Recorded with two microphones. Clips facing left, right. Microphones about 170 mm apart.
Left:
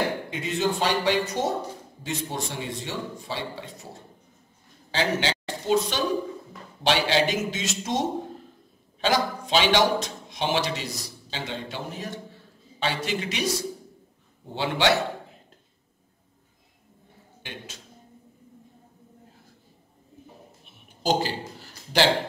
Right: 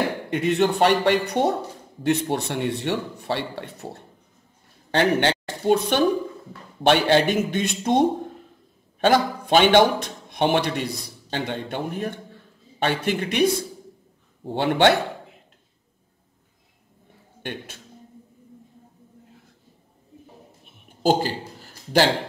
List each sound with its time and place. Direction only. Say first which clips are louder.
0.3 s a man's voice: right 6 dB; 65° right (ahead or behind)
17.4 s speech: right 7 dB; 55° right (ahead or behind)
21.0 s a sound: right 4 dB; 50° right (ahead or behind)